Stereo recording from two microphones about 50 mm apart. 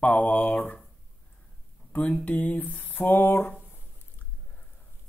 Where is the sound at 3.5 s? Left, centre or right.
Left.